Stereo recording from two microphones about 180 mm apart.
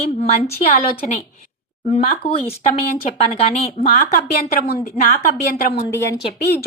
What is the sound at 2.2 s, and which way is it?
Speech, 30° left (ahead or behind).